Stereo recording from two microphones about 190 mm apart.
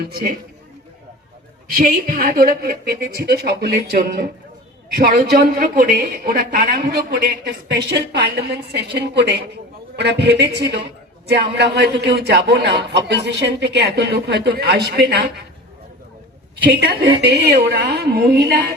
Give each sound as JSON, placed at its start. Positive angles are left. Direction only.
{"t": 0.0, "sound": "a woman's voice", "side_deg": -55}
{"t": 1.7, "sound": "a woman's voice", "side_deg": -50}
{"t": 16.7, "sound": "a man's voice", "side_deg": -60}